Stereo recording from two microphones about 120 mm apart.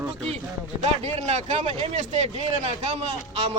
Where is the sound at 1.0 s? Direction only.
65° right (ahead or behind).